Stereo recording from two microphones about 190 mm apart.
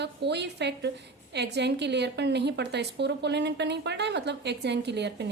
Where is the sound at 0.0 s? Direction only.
65° right (ahead or behind).